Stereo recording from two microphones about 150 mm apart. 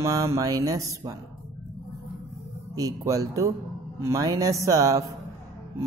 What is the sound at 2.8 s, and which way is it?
Speech, 20° right (ahead or behind).